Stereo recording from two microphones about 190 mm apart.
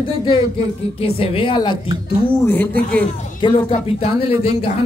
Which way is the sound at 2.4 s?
10° left (ahead or behind).